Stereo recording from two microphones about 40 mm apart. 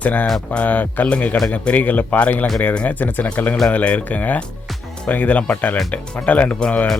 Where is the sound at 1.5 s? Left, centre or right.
Left.